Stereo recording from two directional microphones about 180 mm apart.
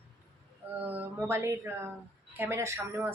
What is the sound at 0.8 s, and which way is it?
Speech, 10° right (ahead or behind).